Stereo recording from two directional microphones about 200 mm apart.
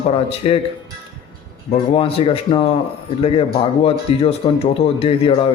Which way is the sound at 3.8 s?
30° left (ahead or behind).